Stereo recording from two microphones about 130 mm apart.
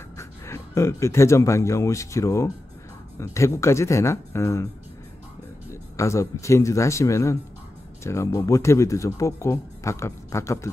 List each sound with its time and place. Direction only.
0.2 s speech: 20° left (ahead or behind)
5.7 s speech: 25° left (ahead or behind)